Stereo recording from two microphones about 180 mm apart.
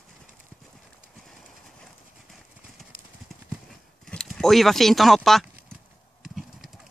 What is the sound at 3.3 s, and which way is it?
Clip-clop, centre (ahead or behind).